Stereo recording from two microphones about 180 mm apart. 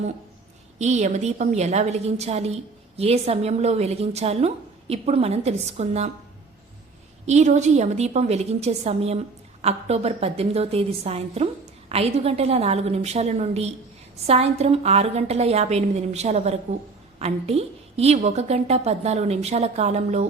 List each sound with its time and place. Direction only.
0.8 s a woman's voice: 40° right (ahead or behind)
7.3 s a woman's voice: 40° right (ahead or behind)